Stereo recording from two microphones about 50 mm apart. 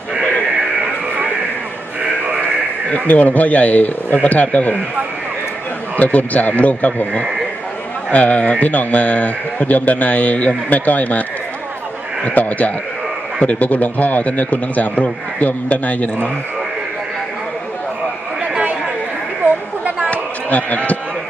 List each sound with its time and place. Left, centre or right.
2.9 s a man's voice: left
6.0 s a man's voice: left
18.5 s chatter: right
20.1 s a sound: left